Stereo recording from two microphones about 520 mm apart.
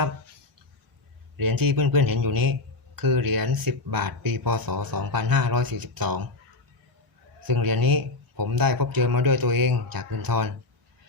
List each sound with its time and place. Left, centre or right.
1.4 s a man's voice: right
7.4 s a man's voice: right